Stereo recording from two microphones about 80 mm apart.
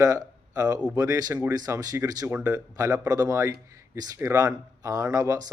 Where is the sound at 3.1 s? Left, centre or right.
Right.